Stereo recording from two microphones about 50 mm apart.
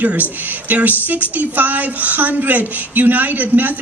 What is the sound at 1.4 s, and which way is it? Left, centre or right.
Speech, right.